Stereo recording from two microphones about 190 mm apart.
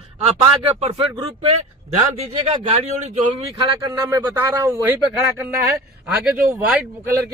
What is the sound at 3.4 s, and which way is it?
Speech, 20° right (ahead or behind).